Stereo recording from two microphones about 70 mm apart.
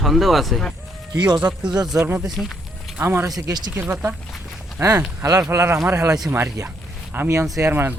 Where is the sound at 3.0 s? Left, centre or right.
Right.